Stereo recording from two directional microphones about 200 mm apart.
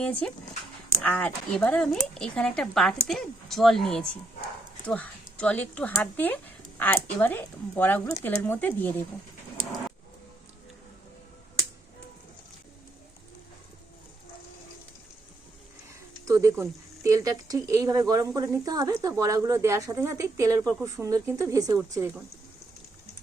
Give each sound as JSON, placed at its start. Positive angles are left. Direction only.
{"t": 0.0, "sound": "speech", "side_deg": 5}
{"t": 16.2, "sound": "speech", "side_deg": -15}